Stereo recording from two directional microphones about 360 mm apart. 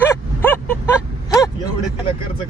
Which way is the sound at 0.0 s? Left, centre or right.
Centre.